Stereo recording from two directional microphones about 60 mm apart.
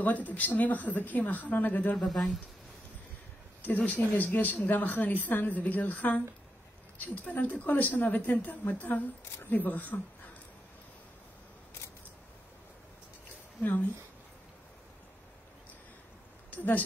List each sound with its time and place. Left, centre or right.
0.0 s speech: left
2.0 s speech: centre
3.6 s speech: left
13.6 s speech: left
16.5 s speech: left